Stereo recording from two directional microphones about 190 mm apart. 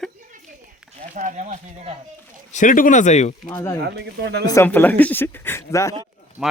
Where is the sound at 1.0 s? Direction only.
40° right (ahead or behind).